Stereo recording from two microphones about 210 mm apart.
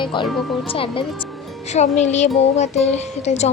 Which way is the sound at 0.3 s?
Centre (ahead or behind).